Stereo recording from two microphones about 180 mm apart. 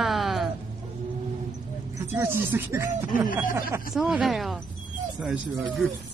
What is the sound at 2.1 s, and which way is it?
Speech, 15° right (ahead or behind).